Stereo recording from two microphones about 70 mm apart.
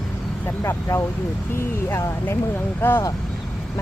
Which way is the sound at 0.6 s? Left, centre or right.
Left.